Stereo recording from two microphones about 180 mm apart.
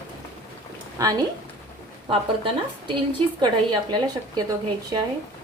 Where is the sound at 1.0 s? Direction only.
20° right (ahead or behind).